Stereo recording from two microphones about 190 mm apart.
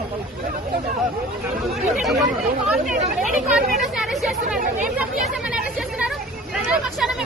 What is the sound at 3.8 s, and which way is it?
Speech, centre (ahead or behind).